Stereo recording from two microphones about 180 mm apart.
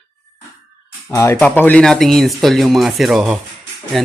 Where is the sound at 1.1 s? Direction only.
10° left (ahead or behind).